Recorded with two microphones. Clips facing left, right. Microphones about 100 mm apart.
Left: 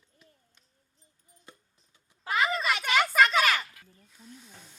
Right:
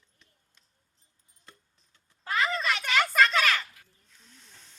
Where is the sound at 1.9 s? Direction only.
10° left (ahead or behind).